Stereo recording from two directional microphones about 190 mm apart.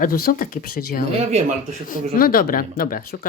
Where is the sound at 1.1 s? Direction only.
35° right (ahead or behind).